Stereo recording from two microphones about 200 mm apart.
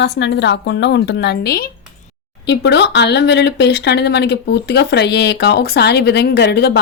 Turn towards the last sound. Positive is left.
turn(degrees=55)  # may be behind; listen again after turning